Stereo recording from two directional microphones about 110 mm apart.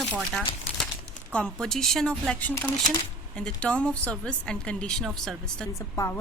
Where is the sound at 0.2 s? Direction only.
Centre (ahead or behind).